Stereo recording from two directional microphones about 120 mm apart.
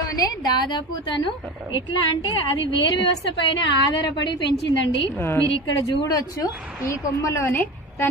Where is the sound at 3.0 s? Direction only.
45° left (ahead or behind).